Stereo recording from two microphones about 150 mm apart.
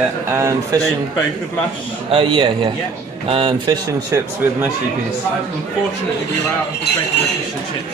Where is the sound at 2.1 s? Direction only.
35° right (ahead or behind).